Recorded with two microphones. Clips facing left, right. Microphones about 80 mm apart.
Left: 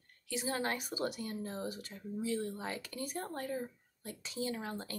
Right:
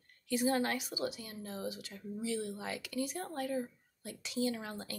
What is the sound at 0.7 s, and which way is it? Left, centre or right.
Speech, left.